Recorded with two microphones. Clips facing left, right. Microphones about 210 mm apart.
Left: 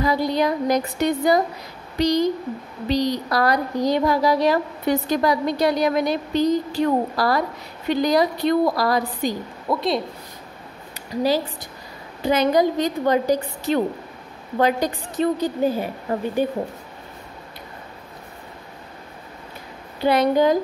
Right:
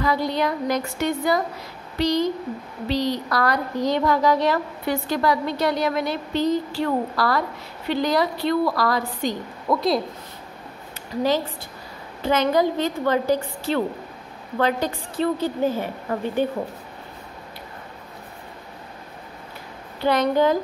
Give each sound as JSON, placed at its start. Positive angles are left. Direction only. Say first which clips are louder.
{"t": 0.0, "sound": "a woman's voice", "louder": "left 2 dB", "side_deg": 15}
{"t": 9.8, "sound": "speech", "louder": "right 1 dB", "side_deg": 0}
{"t": 11.1, "sound": "a woman's voice", "louder": "left 1 dB", "side_deg": 15}
{"t": 20.0, "sound": "a woman's voice", "louder": "left 2 dB", "side_deg": 10}